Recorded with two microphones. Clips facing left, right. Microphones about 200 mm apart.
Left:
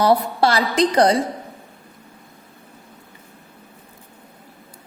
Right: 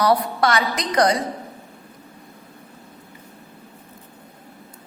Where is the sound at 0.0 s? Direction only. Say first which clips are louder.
Left 2 dB; 25° left (ahead or behind).